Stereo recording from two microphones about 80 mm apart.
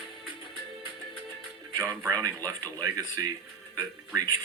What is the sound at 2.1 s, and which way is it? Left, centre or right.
Speech, right.